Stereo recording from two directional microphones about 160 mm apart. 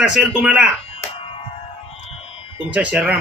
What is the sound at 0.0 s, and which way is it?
Speech, 5° right (ahead or behind).